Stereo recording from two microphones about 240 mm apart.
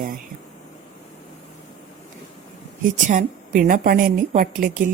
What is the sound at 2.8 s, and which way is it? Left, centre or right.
A woman's voice, right.